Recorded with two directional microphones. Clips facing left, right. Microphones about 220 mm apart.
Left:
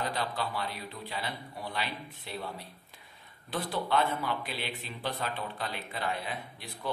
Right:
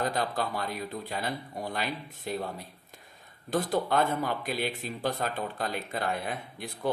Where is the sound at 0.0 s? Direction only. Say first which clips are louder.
Right 4 dB; 45° right (ahead or behind).